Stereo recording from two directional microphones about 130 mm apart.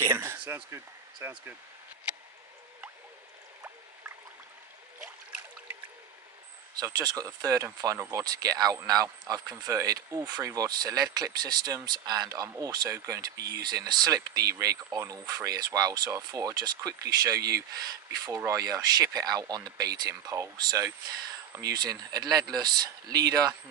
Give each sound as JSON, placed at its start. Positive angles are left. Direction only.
{"t": 0.0, "sound": "speech", "side_deg": -20}
{"t": 6.8, "sound": "speech", "side_deg": -30}